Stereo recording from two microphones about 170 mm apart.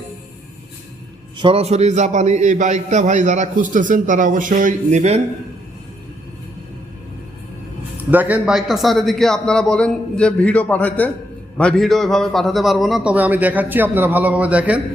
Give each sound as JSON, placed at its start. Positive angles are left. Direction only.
{"t": 1.4, "sound": "a man's voice", "side_deg": -35}
{"t": 8.1, "sound": "a man's voice", "side_deg": -10}